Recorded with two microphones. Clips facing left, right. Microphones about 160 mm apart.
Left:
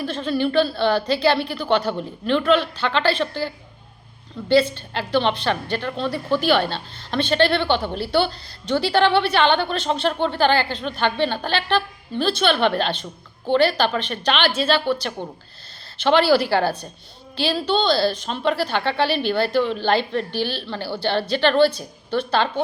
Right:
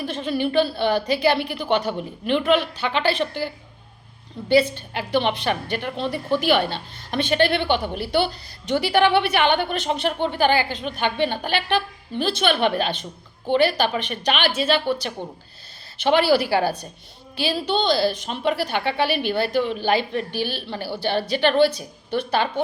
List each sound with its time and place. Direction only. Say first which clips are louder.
0.0 s a woman's voice: left 2 dB; 15° right (ahead or behind)
4.9 s a woman's voice: left 1 dB; 15° right (ahead or behind)
16.3 s a woman's voice: left 1 dB; 10° right (ahead or behind)